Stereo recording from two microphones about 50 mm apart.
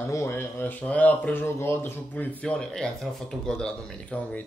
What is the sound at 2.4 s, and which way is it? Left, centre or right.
Speech, centre.